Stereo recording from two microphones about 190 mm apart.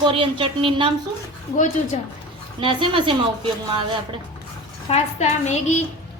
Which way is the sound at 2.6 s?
25° right (ahead or behind).